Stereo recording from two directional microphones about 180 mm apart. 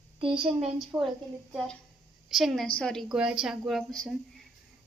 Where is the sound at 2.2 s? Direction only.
Centre (ahead or behind).